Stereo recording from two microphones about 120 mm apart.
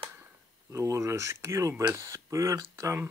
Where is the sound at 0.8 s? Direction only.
25° right (ahead or behind).